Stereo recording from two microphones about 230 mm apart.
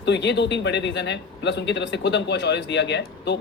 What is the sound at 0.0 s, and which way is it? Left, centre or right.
Speech, left.